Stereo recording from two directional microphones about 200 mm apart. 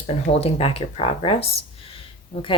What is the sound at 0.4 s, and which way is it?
Speech, 30° left (ahead or behind).